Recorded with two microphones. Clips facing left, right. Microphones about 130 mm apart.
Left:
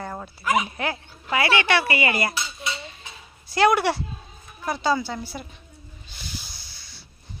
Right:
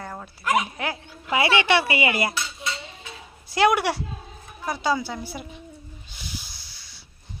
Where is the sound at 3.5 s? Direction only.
15° right (ahead or behind).